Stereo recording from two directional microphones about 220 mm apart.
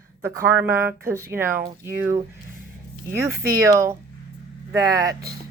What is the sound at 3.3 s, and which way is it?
Speech, 45° right (ahead or behind).